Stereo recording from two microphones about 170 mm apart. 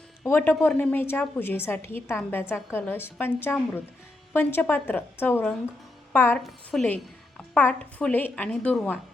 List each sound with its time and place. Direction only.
0.2 s a woman's voice: 10° left (ahead or behind)